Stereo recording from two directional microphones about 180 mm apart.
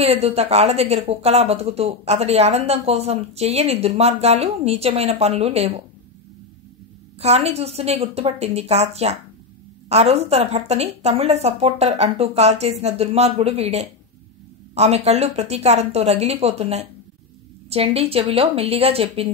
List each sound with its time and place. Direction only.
0.0 s speech: 35° right (ahead or behind)
7.2 s speech: 35° right (ahead or behind)